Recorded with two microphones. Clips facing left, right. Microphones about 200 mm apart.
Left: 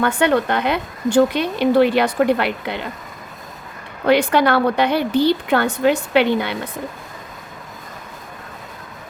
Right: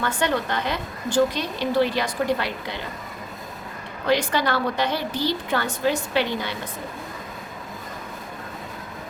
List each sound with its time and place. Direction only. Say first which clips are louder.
0.0 s a woman's voice: left 7 dB; 60° left (ahead or behind)
4.0 s a woman's voice: left 7 dB; 60° left (ahead or behind)